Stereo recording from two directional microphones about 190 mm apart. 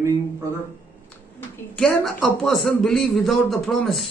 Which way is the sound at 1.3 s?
Centre (ahead or behind).